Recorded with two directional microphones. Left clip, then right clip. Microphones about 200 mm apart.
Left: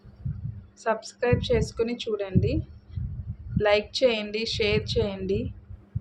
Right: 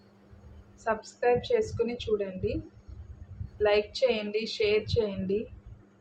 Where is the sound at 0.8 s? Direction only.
55° left (ahead or behind).